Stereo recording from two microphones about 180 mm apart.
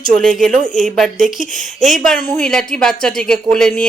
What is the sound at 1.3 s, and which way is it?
Speech, 45° left (ahead or behind).